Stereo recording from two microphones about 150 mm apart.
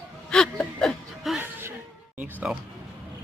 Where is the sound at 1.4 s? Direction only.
15° right (ahead or behind).